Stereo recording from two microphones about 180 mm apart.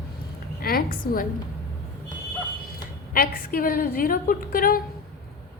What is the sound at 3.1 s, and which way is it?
A woman's voice, 55° left (ahead or behind).